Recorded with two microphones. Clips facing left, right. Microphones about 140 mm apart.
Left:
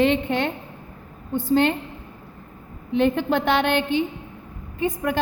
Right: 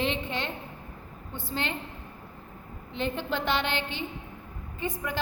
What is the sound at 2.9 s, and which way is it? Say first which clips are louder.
A woman's voice: left 11 dB; 60° left (ahead or behind).